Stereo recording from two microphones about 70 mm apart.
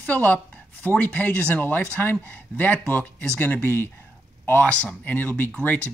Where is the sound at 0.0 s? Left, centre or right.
Left.